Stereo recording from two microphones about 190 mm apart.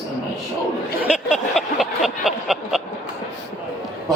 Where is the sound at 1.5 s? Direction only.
Centre (ahead or behind).